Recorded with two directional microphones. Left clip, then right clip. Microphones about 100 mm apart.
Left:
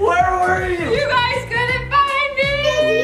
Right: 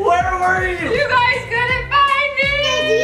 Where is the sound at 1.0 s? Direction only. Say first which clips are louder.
Right 2 dB; 15° left (ahead or behind).